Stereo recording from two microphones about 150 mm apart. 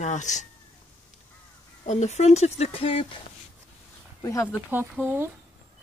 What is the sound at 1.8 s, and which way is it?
Speech, 50° left (ahead or behind).